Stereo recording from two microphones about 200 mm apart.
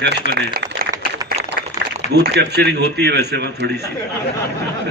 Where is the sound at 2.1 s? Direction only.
55° right (ahead or behind).